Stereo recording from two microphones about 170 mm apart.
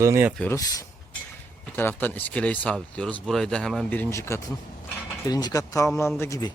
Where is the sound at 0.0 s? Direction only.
15° right (ahead or behind).